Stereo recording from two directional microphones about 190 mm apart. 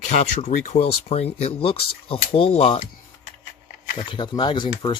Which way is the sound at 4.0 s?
25° left (ahead or behind).